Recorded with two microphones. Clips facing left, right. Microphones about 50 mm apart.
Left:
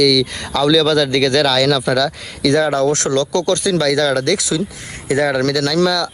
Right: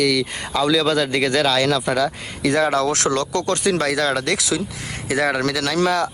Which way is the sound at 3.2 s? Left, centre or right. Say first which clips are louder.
Left 5 dB; left.